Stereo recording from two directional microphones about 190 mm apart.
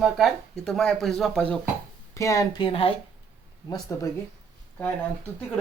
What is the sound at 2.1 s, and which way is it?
Speech, 15° left (ahead or behind).